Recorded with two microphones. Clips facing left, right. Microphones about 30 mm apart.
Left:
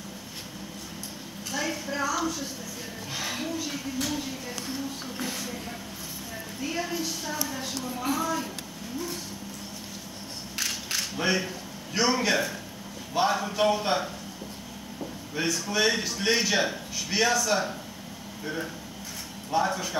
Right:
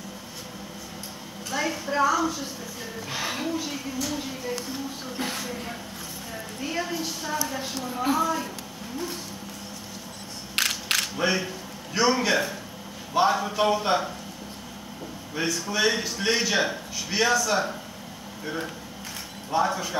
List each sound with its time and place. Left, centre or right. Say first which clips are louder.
1.5 s a woman's voice: right 4 dB; centre
5.1 s speech: right 5 dB; right
6.6 s a man's voice: right 1 dB; centre
7.4 s a man's voice: right 2 dB; right
10.5 s a sound: right 6 dB; right
11.1 s a man's voice: right 1 dB; centre
15.3 s a man's voice: right 1 dB; centre
19.5 s a man's voice: right 2 dB; centre